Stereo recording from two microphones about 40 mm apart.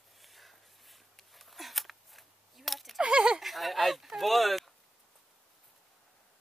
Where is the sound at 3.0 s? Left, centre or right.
Right.